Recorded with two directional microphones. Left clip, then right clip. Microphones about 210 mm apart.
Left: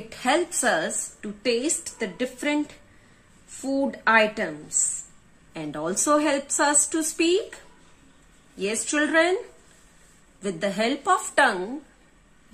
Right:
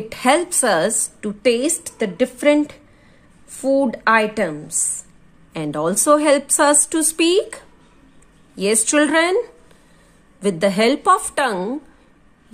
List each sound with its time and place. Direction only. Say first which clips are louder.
0.1 s a woman's voice: right 7 dB; 50° right (ahead or behind)
8.5 s a woman's voice: right 8 dB; 55° right (ahead or behind)
10.4 s a woman's voice: right 9 dB; 50° right (ahead or behind)